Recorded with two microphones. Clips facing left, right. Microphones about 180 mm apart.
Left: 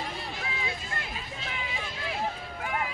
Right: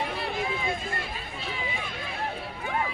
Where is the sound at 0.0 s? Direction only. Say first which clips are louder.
Right 6 dB; 65° right (ahead or behind).